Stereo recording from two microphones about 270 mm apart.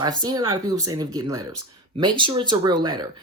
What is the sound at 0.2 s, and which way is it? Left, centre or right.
Speech, centre.